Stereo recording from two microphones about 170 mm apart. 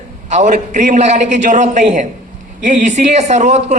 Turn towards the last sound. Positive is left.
turn(degrees=-45)  # may be behind; listen again after turning